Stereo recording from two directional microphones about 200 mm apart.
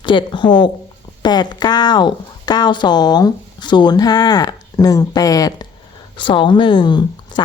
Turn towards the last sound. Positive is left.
turn(degrees=25)  # may be behind; listen again after turning